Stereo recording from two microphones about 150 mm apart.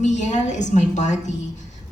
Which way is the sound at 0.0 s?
50° left (ahead or behind).